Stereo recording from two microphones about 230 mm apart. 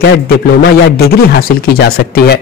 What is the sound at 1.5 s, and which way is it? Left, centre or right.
Speech, left.